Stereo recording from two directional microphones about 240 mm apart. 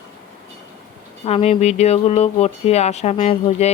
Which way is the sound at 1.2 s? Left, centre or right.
Left.